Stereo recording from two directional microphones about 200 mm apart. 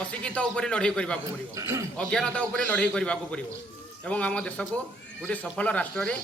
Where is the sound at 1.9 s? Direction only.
5° left (ahead or behind).